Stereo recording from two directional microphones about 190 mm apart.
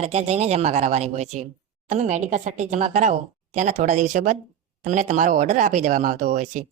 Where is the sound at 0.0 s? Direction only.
35° right (ahead or behind).